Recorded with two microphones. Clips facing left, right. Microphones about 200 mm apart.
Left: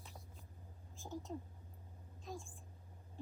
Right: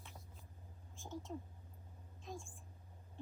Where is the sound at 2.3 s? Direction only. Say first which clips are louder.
Left 1 dB; centre (ahead or behind).